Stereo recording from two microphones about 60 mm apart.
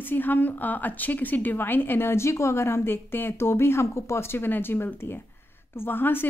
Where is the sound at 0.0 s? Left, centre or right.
Left.